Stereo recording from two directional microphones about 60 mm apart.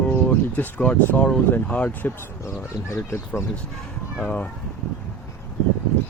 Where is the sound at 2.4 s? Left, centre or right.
Left.